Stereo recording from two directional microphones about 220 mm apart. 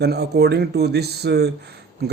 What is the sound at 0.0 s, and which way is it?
Speech, 50° right (ahead or behind).